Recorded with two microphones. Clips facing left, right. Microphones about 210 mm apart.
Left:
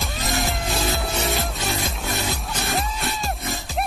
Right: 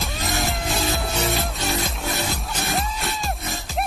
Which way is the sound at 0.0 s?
Centre (ahead or behind).